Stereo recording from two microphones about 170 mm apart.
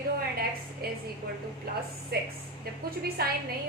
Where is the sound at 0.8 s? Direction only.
65° right (ahead or behind).